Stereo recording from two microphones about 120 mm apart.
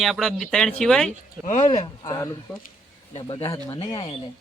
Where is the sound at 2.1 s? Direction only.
30° left (ahead or behind).